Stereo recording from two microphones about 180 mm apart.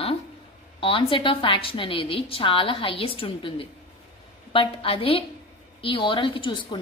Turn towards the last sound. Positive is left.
turn(degrees=30)  # may be behind; listen again after turning